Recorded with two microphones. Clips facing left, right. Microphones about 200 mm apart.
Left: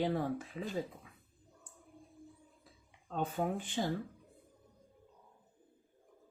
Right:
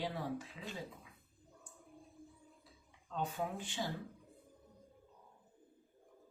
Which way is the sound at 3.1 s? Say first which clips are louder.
Left 5 dB; 50° left (ahead or behind).